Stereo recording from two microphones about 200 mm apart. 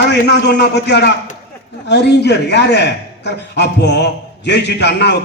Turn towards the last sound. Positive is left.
turn(degrees=55)  # may be behind; listen again after turning